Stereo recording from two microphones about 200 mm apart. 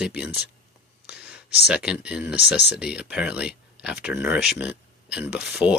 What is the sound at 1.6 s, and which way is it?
Speech, 5° right (ahead or behind).